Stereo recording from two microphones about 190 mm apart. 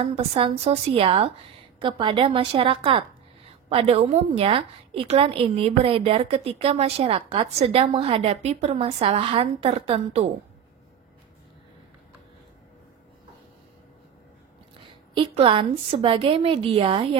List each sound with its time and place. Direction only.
0.0 s a woman's voice: 30° right (ahead or behind)
14.8 s a woman's voice: 25° right (ahead or behind)